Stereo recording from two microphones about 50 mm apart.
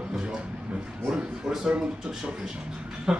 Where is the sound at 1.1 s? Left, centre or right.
Centre.